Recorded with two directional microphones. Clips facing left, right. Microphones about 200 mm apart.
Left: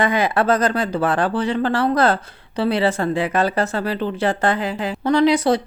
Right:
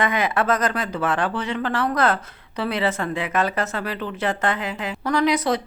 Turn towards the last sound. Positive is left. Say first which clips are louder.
# left 5 dB
turn(degrees=30)  # may be behind; listen again after turning